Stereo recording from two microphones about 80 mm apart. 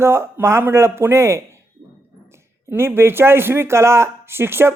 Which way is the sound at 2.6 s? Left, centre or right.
Right.